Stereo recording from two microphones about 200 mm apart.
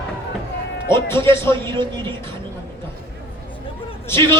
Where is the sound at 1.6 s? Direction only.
25° right (ahead or behind).